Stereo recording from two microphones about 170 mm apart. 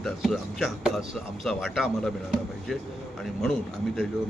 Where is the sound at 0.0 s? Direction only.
Centre (ahead or behind).